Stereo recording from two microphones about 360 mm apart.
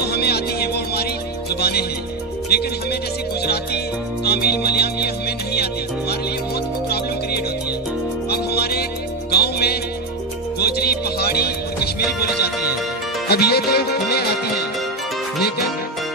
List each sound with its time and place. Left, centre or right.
0.0 s music: left
8.3 s music: left
13.3 s music: left